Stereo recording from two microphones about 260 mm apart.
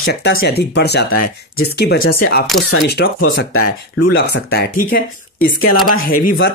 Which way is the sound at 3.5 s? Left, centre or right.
Left.